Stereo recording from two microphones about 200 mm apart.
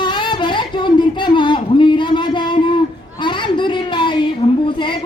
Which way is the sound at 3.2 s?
25° left (ahead or behind).